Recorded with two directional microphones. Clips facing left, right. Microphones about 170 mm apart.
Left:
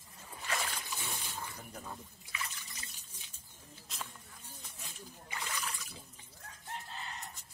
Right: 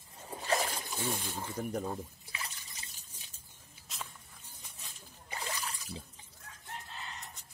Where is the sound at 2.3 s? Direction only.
30° right (ahead or behind).